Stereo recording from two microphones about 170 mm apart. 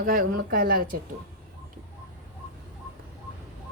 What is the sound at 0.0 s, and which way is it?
Speech, 55° right (ahead or behind).